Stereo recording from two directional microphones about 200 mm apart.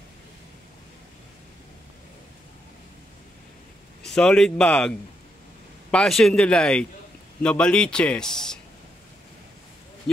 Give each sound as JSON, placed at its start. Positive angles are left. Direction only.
{"t": 4.0, "sound": "speech", "side_deg": 5}
{"t": 10.1, "sound": "speech", "side_deg": 5}